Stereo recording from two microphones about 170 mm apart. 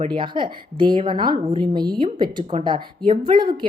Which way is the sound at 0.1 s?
30° right (ahead or behind).